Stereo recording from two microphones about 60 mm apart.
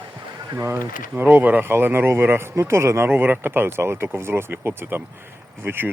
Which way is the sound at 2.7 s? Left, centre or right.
Right.